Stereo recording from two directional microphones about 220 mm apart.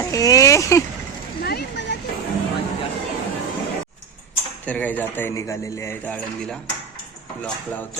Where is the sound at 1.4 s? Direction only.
50° left (ahead or behind).